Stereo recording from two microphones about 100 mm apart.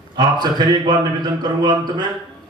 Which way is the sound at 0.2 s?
45° right (ahead or behind).